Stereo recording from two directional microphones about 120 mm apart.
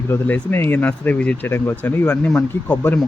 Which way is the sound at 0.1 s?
15° left (ahead or behind).